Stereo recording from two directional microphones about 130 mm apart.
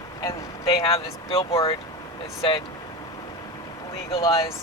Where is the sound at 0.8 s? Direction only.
45° left (ahead or behind).